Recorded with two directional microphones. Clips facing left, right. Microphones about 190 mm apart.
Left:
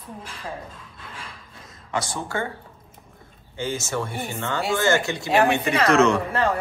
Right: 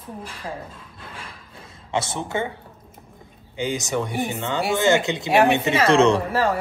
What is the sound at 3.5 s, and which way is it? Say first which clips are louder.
Speech: right 3 dB; 15° right (ahead or behind).